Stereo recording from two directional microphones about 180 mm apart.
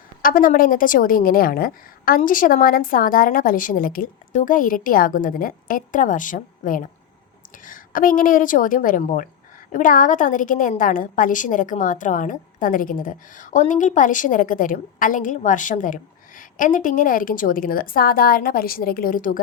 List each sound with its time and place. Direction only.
0.2 s a woman's voice: 50° left (ahead or behind)